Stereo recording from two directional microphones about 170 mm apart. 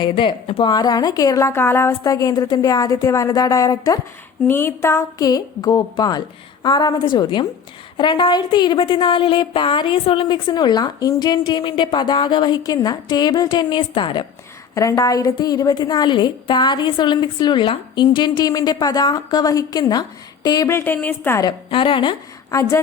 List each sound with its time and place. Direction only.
0.0 s a woman's voice: 30° left (ahead or behind)
21.7 s a woman's voice: 30° left (ahead or behind)